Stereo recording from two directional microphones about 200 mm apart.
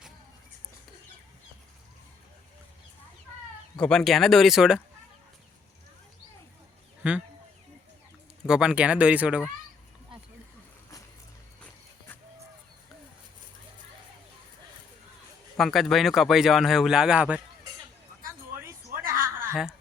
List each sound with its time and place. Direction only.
3.8 s speech: 5° left (ahead or behind)
7.0 s speech: 5° right (ahead or behind)
8.4 s speech: 5° right (ahead or behind)
15.5 s speech: centre (ahead or behind)
19.2 s chuckle: 45° right (ahead or behind)